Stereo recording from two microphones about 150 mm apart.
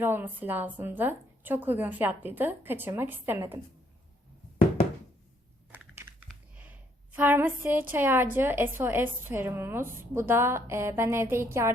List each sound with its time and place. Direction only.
0.0 s a woman's voice: 15° right (ahead or behind)
5.9 s typing: 15° right (ahead or behind)
6.6 s a woman's voice: 10° right (ahead or behind)